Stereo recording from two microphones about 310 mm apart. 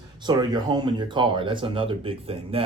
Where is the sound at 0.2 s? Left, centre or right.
Centre.